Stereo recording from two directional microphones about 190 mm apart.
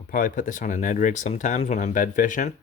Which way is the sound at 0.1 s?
45° left (ahead or behind).